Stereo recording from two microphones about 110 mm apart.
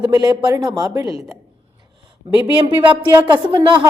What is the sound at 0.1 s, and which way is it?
Speech, 35° right (ahead or behind).